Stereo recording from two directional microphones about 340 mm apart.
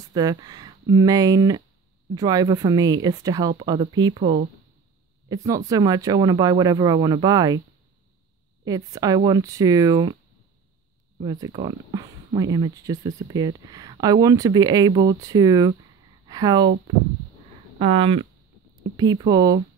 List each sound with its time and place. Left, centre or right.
0.1 s speech: centre
8.6 s speech: centre
11.1 s speech: centre